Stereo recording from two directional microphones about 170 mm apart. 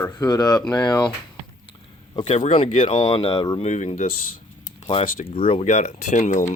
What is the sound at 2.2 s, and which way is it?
Speech, 45° left (ahead or behind).